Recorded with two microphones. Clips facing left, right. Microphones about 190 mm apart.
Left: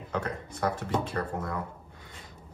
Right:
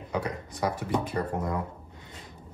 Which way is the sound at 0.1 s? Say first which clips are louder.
Right 1 dB; 10° right (ahead or behind).